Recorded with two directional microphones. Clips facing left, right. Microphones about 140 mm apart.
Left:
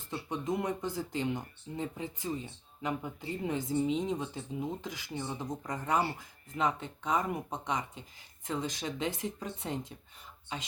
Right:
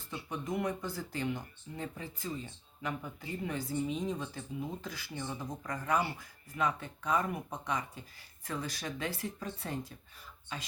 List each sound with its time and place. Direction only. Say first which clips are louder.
0.3 s speech: left 2 dB; 20° left (ahead or behind)